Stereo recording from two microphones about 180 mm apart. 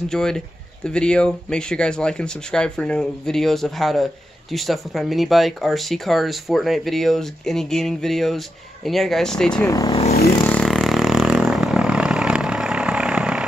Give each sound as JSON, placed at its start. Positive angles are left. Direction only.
{"t": 0.1, "sound": "speech", "side_deg": 5}
{"t": 9.7, "sound": "speech", "side_deg": 20}
{"t": 10.4, "sound": "vehicle", "side_deg": 5}